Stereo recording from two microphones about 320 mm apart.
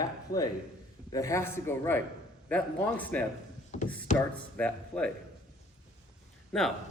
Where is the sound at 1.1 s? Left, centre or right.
Centre.